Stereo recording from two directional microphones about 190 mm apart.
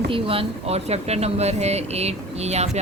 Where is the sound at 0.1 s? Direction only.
30° right (ahead or behind).